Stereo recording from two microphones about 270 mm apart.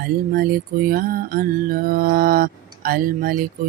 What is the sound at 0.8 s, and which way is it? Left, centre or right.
Mantra, right.